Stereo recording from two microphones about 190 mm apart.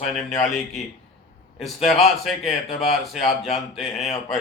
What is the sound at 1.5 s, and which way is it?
Speech, centre (ahead or behind).